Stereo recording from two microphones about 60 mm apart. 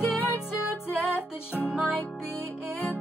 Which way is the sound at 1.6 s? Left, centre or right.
Centre.